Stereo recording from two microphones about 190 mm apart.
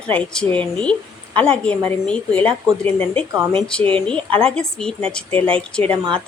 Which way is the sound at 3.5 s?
5° left (ahead or behind).